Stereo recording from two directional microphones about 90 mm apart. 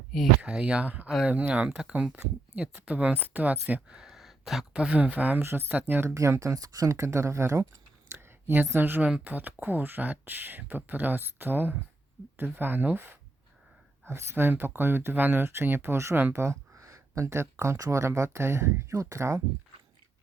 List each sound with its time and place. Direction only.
0.4 s speech: 15° right (ahead or behind); by 19.4 s 35° right (ahead or behind)